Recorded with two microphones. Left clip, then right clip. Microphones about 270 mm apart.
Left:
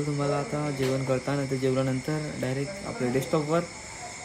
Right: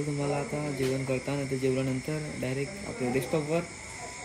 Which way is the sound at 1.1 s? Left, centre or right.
Centre.